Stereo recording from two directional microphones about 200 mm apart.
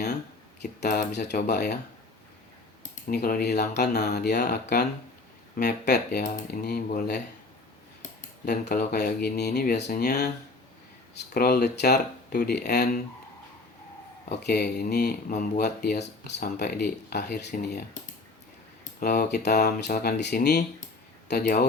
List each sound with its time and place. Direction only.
0.6 s speech: 55° left (ahead or behind)
2.9 s speech: 50° left (ahead or behind)
8.4 s speech: 50° left (ahead or behind)
14.3 s speech: 55° left (ahead or behind)
18.9 s speech: 50° left (ahead or behind)